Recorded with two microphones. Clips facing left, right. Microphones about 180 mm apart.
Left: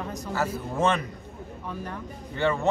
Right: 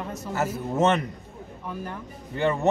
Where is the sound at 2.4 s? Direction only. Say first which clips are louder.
Right 1 dB; 20° right (ahead or behind).